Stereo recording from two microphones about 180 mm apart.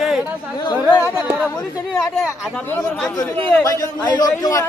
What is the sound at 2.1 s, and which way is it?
Speech, 5° left (ahead or behind).